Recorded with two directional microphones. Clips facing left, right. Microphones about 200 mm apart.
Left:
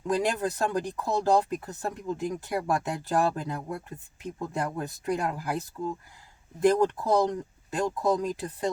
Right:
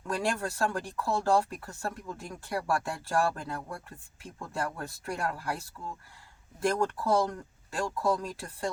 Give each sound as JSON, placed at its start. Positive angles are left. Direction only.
{"t": 0.1, "sound": "speech", "side_deg": 20}